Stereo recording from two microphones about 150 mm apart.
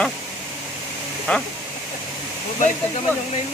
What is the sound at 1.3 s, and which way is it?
Speech, 10° left (ahead or behind).